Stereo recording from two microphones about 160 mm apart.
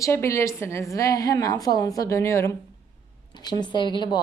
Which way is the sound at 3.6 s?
30° left (ahead or behind).